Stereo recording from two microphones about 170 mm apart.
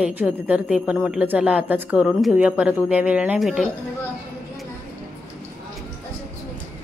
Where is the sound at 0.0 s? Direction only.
5° right (ahead or behind).